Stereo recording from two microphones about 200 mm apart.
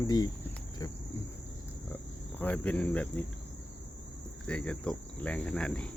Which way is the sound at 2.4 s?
5° left (ahead or behind).